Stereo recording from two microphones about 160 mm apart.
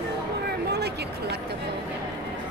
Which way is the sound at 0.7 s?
90° right.